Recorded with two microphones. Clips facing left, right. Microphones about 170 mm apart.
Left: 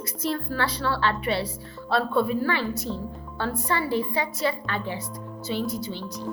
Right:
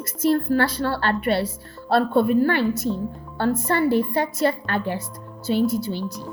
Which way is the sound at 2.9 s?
5° right (ahead or behind).